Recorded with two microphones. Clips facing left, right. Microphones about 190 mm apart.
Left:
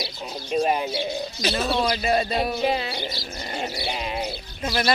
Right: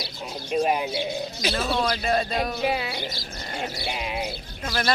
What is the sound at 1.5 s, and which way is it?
A man's voice, 5° left (ahead or behind).